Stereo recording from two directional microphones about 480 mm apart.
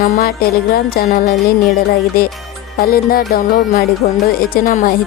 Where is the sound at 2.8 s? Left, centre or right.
Centre.